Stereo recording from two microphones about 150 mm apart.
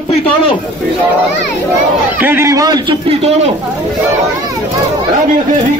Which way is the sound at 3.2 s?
45° right (ahead or behind).